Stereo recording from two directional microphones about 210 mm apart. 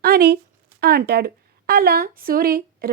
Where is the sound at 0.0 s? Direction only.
45° right (ahead or behind).